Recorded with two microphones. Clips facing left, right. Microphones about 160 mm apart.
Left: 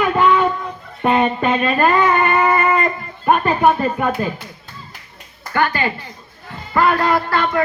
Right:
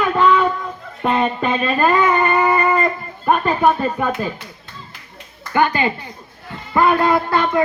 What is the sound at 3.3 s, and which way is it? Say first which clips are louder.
Speech: left 1 dB; 5° left (ahead or behind).